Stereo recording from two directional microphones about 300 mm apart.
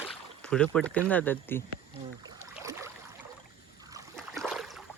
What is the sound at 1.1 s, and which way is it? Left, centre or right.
Speech, centre.